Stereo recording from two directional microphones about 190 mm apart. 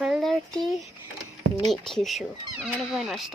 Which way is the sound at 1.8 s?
Centre (ahead or behind).